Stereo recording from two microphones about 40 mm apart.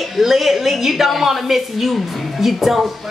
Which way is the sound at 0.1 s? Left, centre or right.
Centre.